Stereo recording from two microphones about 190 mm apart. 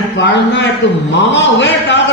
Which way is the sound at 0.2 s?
70° left (ahead or behind).